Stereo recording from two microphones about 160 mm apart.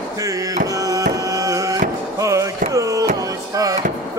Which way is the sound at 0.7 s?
20° right (ahead or behind).